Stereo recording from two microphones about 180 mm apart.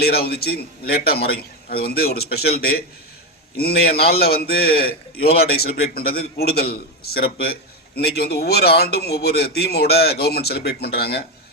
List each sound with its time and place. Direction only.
0.0 s a man's voice: 60° left (ahead or behind)